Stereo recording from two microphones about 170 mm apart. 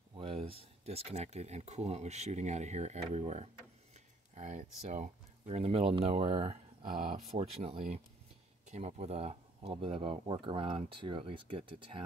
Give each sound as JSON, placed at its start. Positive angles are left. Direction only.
{"t": 0.1, "sound": "speech", "side_deg": -35}